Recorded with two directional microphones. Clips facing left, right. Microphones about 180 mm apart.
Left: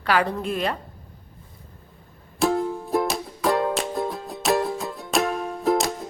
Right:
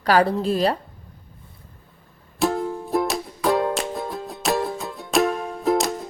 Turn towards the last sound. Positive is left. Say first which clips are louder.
# right 1 dB
turn(degrees=0)  # may be behind; listen again after turning